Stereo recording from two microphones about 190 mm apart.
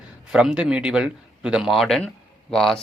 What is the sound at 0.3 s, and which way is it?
A man's voice, 5° right (ahead or behind).